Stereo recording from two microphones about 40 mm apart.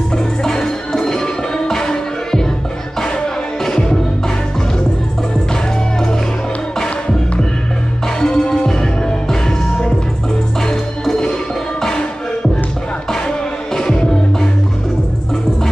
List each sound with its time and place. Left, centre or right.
0.4 s music: centre
8.2 s music: centre
10.7 s music: centre